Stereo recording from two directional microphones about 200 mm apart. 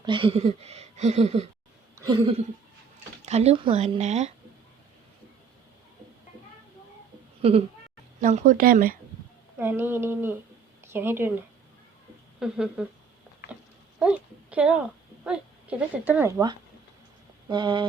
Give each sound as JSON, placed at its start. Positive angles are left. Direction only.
{"t": 0.0, "sound": "speech", "side_deg": -25}
{"t": 3.2, "sound": "speech", "side_deg": -30}
{"t": 7.4, "sound": "speech", "side_deg": -30}
{"t": 8.2, "sound": "speech", "side_deg": -40}
{"t": 9.6, "sound": "speech", "side_deg": -10}
{"t": 12.4, "sound": "speech", "side_deg": -5}
{"t": 14.0, "sound": "speech", "side_deg": -5}
{"t": 17.5, "sound": "speech", "side_deg": -25}